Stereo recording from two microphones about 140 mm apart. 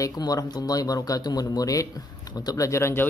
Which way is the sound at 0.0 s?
25° left (ahead or behind).